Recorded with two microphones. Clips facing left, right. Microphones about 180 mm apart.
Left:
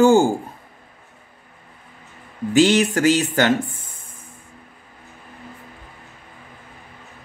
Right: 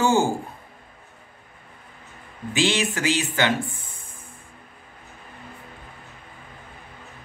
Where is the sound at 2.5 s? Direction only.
40° left (ahead or behind).